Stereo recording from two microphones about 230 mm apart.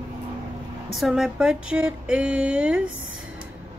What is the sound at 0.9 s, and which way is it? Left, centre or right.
Speech, centre.